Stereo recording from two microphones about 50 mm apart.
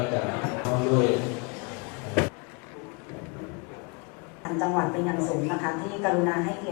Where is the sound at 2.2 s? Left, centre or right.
Centre.